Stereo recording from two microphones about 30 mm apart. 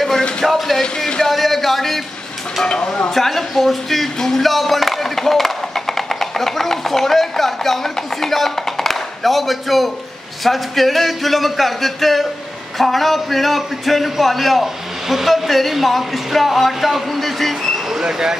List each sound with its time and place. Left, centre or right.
0.5 s a man's voice: centre
0.7 s speech: centre
1.3 s a man's voice: centre
2.6 s speech: left
3.2 s speech: centre
4.5 s a man's voice: centre